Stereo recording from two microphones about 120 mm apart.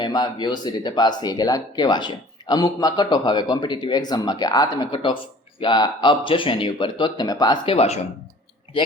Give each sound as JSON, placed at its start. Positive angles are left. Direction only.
{"t": 0.0, "sound": "speech", "side_deg": 40}